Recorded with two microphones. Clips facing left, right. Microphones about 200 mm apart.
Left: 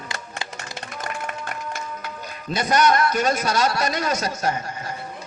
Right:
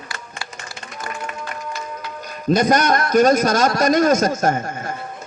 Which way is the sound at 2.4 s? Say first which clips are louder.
Right 4 dB; 45° right (ahead or behind).